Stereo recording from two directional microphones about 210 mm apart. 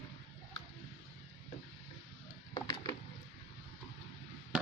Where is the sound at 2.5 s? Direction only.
20° left (ahead or behind).